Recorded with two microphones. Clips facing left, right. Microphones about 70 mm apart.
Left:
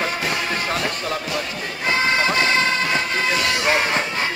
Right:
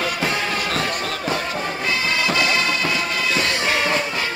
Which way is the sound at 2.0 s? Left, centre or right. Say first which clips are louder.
Left 2 dB; left.